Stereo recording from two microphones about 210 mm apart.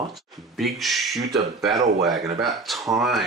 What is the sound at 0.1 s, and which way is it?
Speech, centre (ahead or behind).